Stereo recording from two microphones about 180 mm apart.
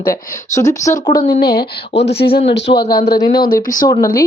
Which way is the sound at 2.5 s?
75° left (ahead or behind).